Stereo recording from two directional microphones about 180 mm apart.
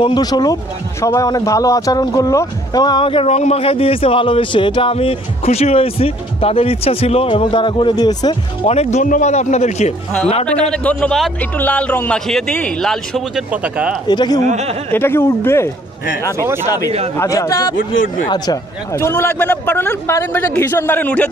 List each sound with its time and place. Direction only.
0.0 s speech: 25° left (ahead or behind)
8.6 s speech: 35° left (ahead or behind)
10.4 s a man's voice: 5° left (ahead or behind)
14.0 s speech: 25° left (ahead or behind)
14.9 s a man's voice: 10° left (ahead or behind)
16.3 s speech: 15° right (ahead or behind)
17.2 s a man's voice: 15° left (ahead or behind)